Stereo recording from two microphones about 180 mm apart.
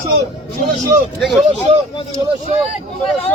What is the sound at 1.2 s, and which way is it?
Speech, centre (ahead or behind).